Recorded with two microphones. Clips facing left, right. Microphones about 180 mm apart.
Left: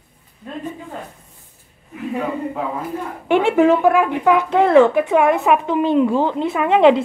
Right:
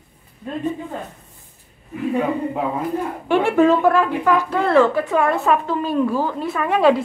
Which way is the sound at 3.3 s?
20° left (ahead or behind).